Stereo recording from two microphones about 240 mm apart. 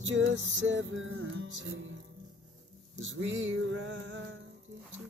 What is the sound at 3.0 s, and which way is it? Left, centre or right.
Music, right.